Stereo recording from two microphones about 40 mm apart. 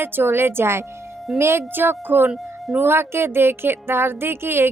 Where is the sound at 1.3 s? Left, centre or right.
Right.